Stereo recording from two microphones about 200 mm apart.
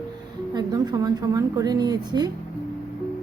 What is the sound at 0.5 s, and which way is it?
Speech, 20° right (ahead or behind).